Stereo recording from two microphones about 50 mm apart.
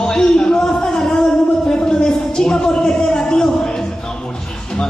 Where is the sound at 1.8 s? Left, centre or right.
Centre.